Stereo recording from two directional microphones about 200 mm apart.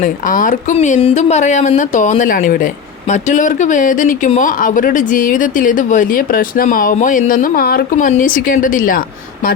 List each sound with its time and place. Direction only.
0.0 s speech: 40° left (ahead or behind)